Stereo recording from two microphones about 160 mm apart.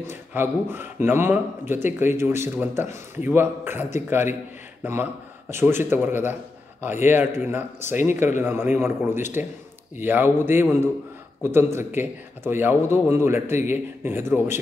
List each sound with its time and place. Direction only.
0.0 s speech: 15° right (ahead or behind)